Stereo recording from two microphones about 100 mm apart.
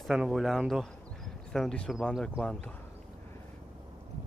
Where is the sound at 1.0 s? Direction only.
5° left (ahead or behind).